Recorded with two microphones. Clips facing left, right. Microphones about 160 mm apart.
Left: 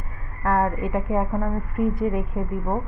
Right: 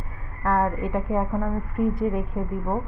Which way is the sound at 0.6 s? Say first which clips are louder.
Left 1 dB; 5° left (ahead or behind).